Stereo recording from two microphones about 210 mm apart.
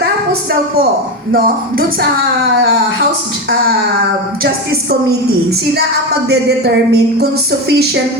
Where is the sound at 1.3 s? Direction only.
45° right (ahead or behind).